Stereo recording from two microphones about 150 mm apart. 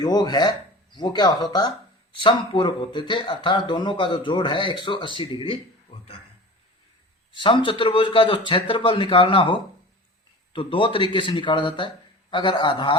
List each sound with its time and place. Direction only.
0.0 s speech: 25° left (ahead or behind)
7.3 s speech: 35° left (ahead or behind)